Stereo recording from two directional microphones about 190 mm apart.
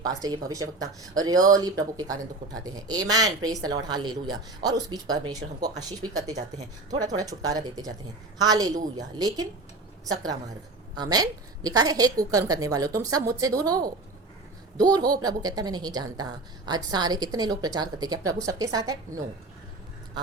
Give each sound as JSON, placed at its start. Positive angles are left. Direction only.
{"t": 0.0, "sound": "a woman's voice", "side_deg": -20}
{"t": 10.9, "sound": "a woman's voice", "side_deg": -20}